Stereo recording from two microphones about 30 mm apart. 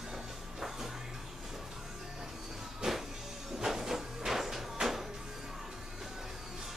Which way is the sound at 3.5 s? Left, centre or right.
Centre.